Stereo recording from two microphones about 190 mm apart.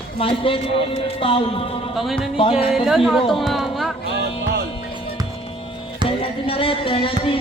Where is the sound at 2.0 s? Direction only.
Centre (ahead or behind).